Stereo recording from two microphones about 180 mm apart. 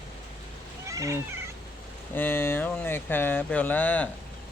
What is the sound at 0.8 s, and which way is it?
Cat, 15° right (ahead or behind).